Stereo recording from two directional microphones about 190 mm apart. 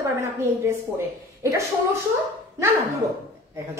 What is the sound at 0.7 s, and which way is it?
A woman's voice, 15° right (ahead or behind).